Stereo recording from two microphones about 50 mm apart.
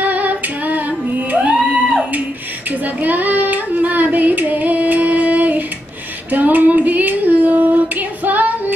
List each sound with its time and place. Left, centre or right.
0.0 s female singing: right
1.4 s music: right
2.7 s child singing: right